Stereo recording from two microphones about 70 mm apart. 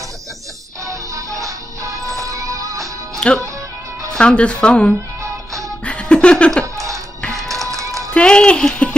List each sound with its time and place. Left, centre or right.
0.8 s music: right
3.2 s speech: centre
5.2 s music: right
5.9 s music: centre
6.6 s music: right
8.1 s speech: centre